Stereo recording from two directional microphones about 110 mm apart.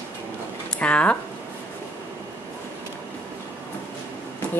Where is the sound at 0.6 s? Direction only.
10° left (ahead or behind).